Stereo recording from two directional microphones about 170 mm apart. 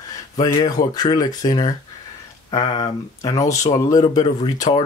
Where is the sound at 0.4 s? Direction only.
25° left (ahead or behind).